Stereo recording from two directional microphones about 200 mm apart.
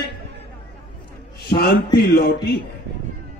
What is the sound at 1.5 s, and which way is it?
A man's voice, 50° left (ahead or behind).